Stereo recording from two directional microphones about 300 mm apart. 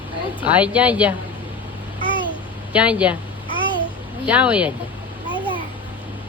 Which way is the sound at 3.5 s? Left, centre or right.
Centre.